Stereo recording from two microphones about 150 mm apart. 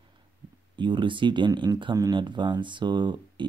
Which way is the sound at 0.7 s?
30° right (ahead or behind).